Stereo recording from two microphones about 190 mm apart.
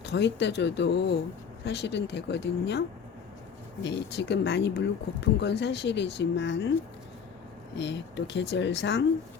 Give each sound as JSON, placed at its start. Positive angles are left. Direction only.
{"t": 0.0, "sound": "speech", "side_deg": 65}
{"t": 3.8, "sound": "speech", "side_deg": 65}
{"t": 7.8, "sound": "speech", "side_deg": 70}